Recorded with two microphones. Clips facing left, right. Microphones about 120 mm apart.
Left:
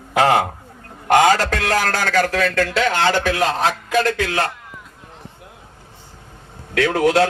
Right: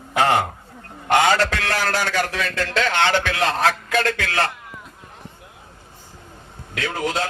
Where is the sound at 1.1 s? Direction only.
40° left (ahead or behind).